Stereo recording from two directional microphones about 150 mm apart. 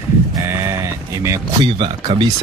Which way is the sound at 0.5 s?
15° right (ahead or behind).